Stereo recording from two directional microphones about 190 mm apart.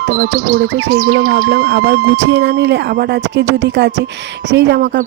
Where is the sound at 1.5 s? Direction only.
55° right (ahead or behind).